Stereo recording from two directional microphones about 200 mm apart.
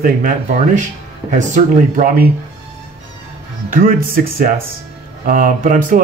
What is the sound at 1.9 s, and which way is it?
Speech, 40° right (ahead or behind).